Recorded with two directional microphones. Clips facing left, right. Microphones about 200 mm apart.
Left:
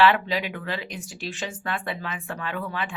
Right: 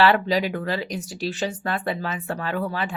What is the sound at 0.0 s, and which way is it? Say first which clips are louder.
Speech: right 2 dB; 40° right (ahead or behind).